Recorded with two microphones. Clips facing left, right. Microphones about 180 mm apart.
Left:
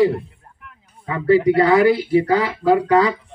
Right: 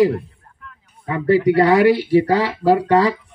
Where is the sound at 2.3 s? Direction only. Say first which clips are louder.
Right 1 dB; 35° right (ahead or behind).